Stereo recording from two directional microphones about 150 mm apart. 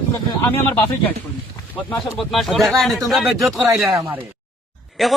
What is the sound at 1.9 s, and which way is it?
Speech, centre (ahead or behind).